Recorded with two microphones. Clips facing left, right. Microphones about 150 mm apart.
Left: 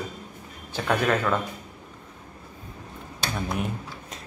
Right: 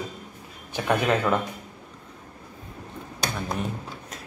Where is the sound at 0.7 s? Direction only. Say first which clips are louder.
Right 1 dB; 15° right (ahead or behind).